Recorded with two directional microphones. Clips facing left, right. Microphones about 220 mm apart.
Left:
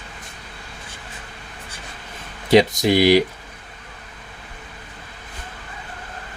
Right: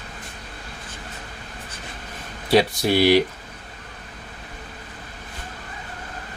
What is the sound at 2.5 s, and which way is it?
Speech, 20° left (ahead or behind).